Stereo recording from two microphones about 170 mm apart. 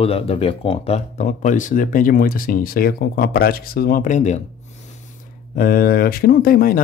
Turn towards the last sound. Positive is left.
turn(degrees=60)  # may be behind; listen again after turning